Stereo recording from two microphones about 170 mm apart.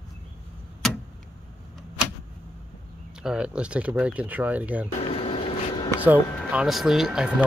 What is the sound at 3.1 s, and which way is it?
Speech, 5° right (ahead or behind).